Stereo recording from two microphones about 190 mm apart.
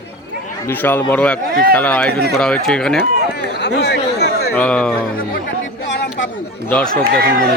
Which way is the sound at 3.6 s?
65° left (ahead or behind).